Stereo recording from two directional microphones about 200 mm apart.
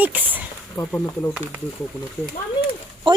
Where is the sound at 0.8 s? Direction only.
10° left (ahead or behind).